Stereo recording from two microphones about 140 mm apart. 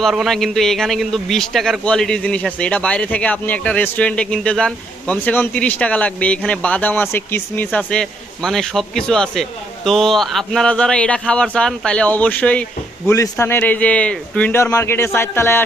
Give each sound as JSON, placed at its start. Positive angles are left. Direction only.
{"t": 0.0, "sound": "a man's voice", "side_deg": 0}
{"t": 13.1, "sound": "a man's voice", "side_deg": 25}